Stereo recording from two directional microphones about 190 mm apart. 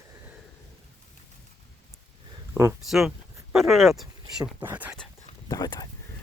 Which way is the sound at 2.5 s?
15° right (ahead or behind).